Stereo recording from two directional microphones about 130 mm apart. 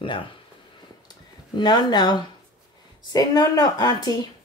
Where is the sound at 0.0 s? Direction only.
40° left (ahead or behind).